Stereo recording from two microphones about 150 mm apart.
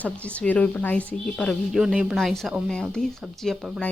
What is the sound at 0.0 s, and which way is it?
Speech, 10° left (ahead or behind).